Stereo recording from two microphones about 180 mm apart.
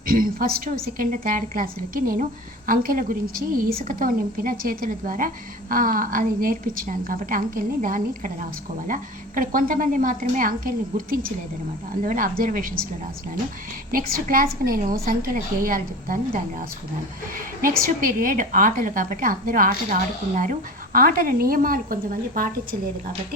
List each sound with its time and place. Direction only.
0.1 s a woman's voice: 55° right (ahead or behind)
13.9 s a woman's voice: 50° right (ahead or behind)
17.3 s a woman's voice: 50° right (ahead or behind)